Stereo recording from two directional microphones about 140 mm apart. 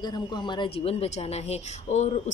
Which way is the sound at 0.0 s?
30° left (ahead or behind).